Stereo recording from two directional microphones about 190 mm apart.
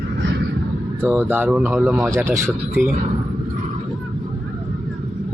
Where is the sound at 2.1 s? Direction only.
15° right (ahead or behind).